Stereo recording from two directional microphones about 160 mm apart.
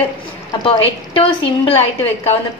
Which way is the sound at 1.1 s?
35° left (ahead or behind).